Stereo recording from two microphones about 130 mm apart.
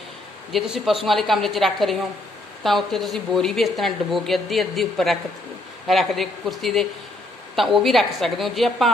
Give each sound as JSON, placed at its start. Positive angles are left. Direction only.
{"t": 0.5, "sound": "a woman's voice", "side_deg": -5}